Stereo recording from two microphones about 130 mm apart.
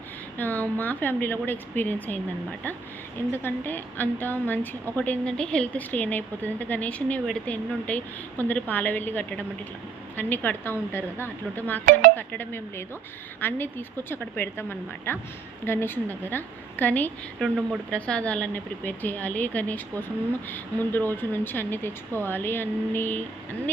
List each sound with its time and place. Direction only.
0.3 s a woman's voice: 15° left (ahead or behind)